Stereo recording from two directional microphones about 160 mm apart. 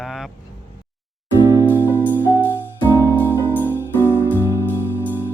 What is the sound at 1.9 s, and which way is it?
Music, 15° left (ahead or behind).